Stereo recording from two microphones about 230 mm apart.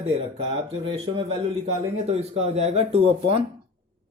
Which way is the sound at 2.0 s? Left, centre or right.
Right.